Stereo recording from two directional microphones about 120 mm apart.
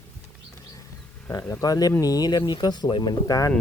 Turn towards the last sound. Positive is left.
turn(degrees=30)  # may be behind; listen again after turning